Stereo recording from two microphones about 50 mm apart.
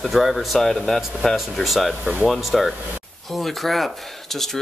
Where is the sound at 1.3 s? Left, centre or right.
Centre.